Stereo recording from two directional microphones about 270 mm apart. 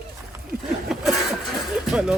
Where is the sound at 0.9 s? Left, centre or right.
Centre.